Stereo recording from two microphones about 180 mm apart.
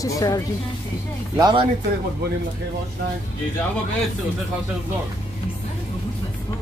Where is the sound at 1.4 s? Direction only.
25° right (ahead or behind).